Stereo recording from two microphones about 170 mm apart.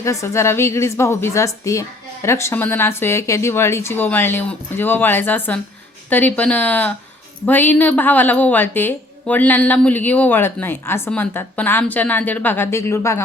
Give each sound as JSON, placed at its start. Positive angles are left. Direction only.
{"t": 0.0, "sound": "a woman's voice", "side_deg": 15}